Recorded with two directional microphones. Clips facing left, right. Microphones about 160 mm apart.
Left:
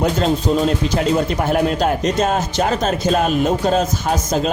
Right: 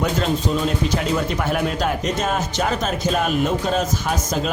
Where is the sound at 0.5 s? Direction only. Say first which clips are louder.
Left 4 dB; 35° left (ahead or behind).